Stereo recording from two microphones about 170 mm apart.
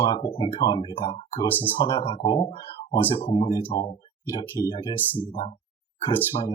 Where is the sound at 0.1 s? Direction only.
30° left (ahead or behind).